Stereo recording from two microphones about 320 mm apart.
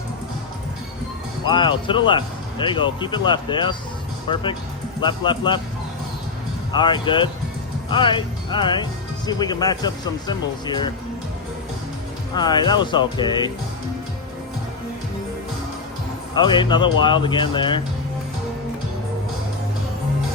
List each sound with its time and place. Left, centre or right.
1.5 s speech: centre
6.7 s speech: centre
12.3 s speech: centre
16.3 s speech: centre